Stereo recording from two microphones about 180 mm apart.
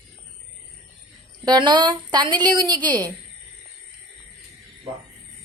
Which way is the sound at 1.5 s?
25° right (ahead or behind).